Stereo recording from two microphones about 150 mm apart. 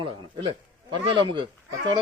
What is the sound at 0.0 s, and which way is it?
A man's voice, 35° right (ahead or behind).